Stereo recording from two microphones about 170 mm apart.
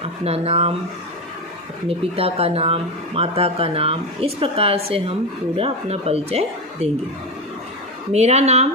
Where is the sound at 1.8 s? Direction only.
35° right (ahead or behind).